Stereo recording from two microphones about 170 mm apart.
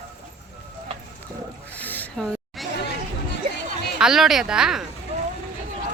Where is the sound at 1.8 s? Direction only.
10° left (ahead or behind).